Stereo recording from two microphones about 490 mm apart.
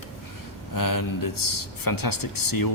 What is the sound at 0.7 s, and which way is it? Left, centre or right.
Speech, left.